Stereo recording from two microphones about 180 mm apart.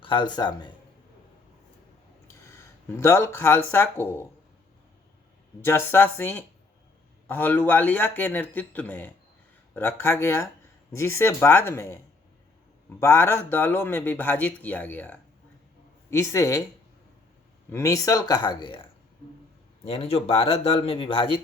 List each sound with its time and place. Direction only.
0.0 s speech: 25° left (ahead or behind)
2.2 s speech: 15° left (ahead or behind)
5.6 s speech: 15° left (ahead or behind)
17.7 s speech: 15° left (ahead or behind)
19.8 s speech: 35° left (ahead or behind)